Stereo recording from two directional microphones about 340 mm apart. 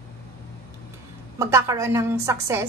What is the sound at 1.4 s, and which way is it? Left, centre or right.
A woman's voice, centre.